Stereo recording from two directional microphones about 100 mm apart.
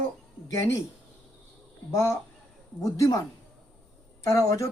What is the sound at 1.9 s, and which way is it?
Speech, 30° left (ahead or behind).